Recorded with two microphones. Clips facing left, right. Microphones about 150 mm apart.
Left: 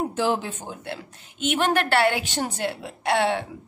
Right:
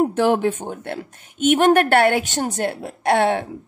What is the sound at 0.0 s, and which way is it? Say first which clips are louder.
A woman's voice: right 7 dB; 55° right (ahead or behind).